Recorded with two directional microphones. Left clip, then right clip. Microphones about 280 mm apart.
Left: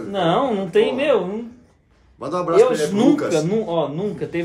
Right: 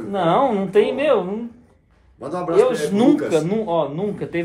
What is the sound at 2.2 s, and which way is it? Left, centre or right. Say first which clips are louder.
Speech: left 2 dB; centre.